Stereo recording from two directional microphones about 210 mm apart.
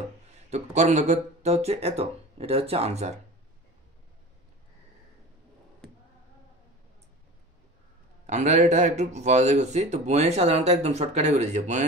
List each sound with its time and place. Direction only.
0.3 s speech: 30° right (ahead or behind)
8.3 s speech: 35° right (ahead or behind)